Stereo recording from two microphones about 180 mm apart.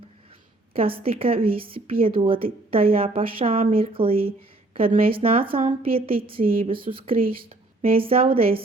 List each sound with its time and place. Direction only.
0.7 s speech: 30° right (ahead or behind)
6.4 s speech: 50° right (ahead or behind)
6.9 s speech: 30° right (ahead or behind)